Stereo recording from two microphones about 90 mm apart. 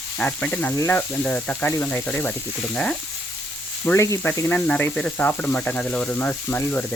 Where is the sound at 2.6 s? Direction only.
10° left (ahead or behind).